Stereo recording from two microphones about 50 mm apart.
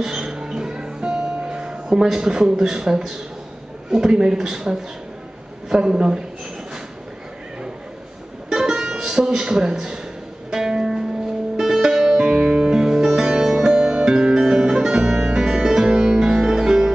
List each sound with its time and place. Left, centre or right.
0.0 s music: centre
3.9 s a man's voice: centre
8.5 s music: centre